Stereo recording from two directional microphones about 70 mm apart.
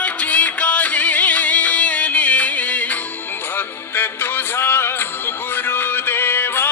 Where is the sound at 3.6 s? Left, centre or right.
Left.